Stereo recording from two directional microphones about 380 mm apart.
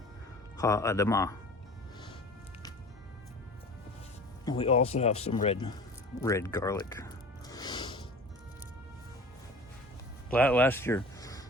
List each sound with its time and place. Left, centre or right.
0.6 s speech: centre
4.4 s speech: centre
6.1 s music: centre
10.3 s speech: centre